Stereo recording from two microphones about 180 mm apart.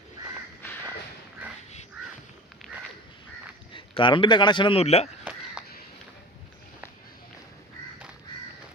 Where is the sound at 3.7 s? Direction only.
25° left (ahead or behind).